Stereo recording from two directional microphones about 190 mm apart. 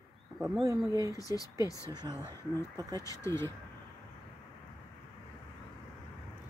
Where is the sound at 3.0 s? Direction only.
15° left (ahead or behind).